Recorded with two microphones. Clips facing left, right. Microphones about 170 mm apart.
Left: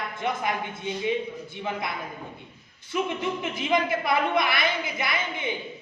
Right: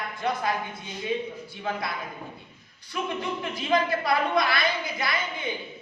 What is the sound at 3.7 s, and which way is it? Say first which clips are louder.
A woman's voice: even; 20° left (ahead or behind).